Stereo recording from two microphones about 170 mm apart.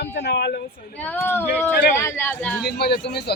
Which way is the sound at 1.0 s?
10° left (ahead or behind).